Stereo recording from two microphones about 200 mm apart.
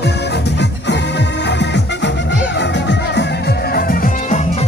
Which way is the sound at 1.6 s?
60° left (ahead or behind).